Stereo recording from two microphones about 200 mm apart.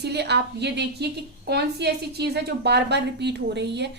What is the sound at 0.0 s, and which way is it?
A woman's voice, 55° right (ahead or behind).